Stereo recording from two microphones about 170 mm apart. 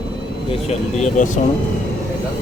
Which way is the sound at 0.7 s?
40° left (ahead or behind).